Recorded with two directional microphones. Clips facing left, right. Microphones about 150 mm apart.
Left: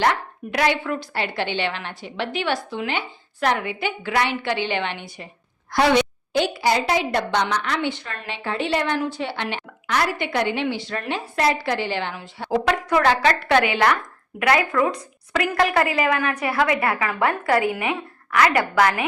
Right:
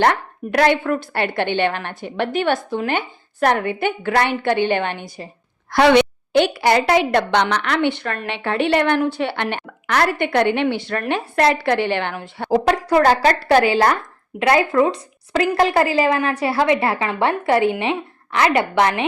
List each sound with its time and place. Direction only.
0.0 s a woman's voice: 55° right (ahead or behind)
5.7 s a woman's voice: 70° right (ahead or behind)
12.5 s a woman's voice: 35° right (ahead or behind)